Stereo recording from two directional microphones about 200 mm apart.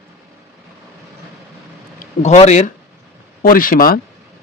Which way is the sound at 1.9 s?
35° left (ahead or behind).